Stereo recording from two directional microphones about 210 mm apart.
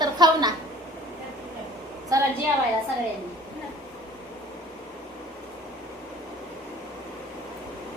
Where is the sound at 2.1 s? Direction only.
15° right (ahead or behind).